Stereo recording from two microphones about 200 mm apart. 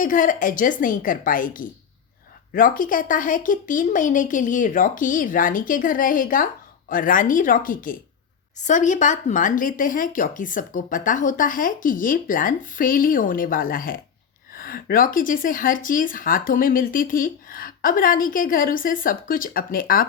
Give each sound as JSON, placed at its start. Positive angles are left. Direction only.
{"t": 0.0, "sound": "speech", "side_deg": 40}